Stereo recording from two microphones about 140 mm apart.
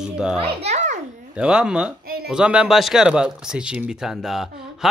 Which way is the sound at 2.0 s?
90° right.